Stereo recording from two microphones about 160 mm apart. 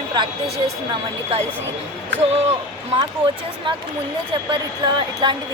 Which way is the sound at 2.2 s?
40° right (ahead or behind).